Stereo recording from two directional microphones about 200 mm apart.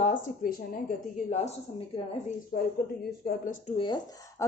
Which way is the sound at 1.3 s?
35° left (ahead or behind).